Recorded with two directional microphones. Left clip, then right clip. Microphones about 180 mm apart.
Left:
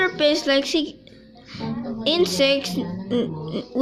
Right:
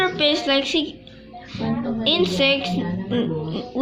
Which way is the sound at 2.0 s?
35° left (ahead or behind).